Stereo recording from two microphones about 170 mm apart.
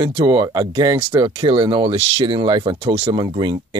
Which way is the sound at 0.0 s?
30° right (ahead or behind).